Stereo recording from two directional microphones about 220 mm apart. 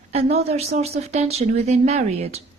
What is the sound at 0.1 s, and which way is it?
Speech, 30° right (ahead or behind).